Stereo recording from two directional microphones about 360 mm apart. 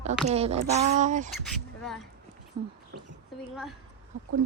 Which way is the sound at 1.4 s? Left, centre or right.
Centre.